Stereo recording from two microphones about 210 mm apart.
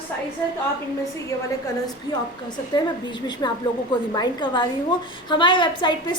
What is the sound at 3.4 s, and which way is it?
A woman's voice, 20° left (ahead or behind).